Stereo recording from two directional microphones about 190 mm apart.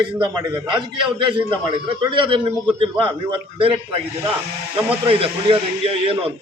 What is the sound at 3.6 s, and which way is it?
Speech, 30° right (ahead or behind).